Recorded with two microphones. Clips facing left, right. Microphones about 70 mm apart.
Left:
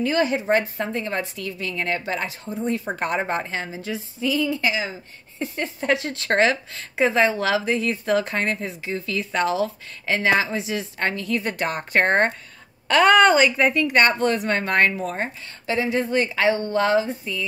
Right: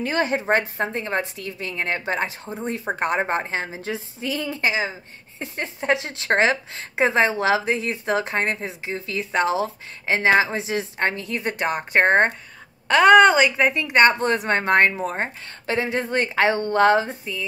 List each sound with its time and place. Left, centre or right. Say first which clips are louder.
0.0 s a woman's voice: left 1 dB; right